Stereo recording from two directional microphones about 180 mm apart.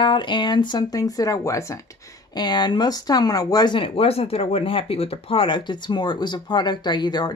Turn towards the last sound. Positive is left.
turn(degrees=25)  # may be behind; listen again after turning